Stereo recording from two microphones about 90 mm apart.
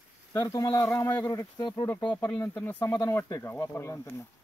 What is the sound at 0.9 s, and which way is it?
Speech, 20° left (ahead or behind).